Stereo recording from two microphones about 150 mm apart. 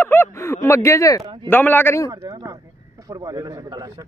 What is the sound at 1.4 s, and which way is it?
Speech, 15° left (ahead or behind).